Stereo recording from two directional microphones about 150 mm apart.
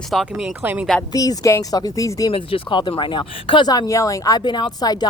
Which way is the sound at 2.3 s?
35° left (ahead or behind).